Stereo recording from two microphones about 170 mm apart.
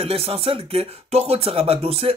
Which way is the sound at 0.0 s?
35° right (ahead or behind).